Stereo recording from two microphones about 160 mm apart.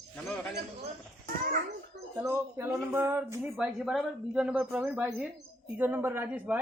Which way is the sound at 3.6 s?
5° right (ahead or behind).